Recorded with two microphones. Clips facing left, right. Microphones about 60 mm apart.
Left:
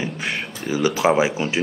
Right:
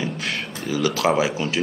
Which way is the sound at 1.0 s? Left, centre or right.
Centre.